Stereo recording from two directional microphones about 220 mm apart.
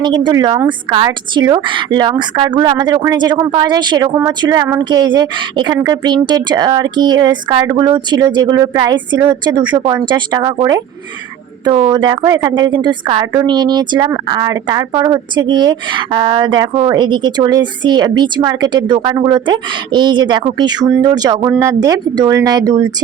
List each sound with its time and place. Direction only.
0.0 s speech: 20° right (ahead or behind)